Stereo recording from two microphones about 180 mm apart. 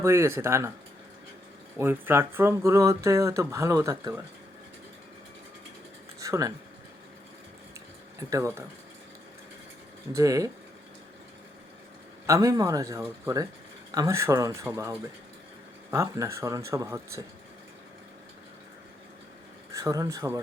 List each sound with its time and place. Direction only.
0.0 s speech: 15° right (ahead or behind)
1.8 s speech: 10° right (ahead or behind)
6.1 s a sound: 20° right (ahead or behind)
8.3 s speech: 15° right (ahead or behind)
10.1 s a man's voice: 20° right (ahead or behind)
12.2 s a man's voice: 15° right (ahead or behind)
19.7 s speech: 20° right (ahead or behind)